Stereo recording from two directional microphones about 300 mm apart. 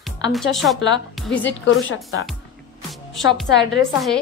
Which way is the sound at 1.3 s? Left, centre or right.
Left.